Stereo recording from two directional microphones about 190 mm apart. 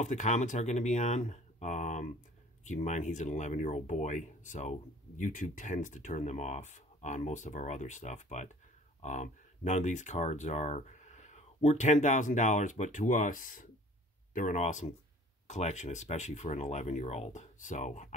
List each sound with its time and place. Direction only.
0.0 s speech: 40° left (ahead or behind)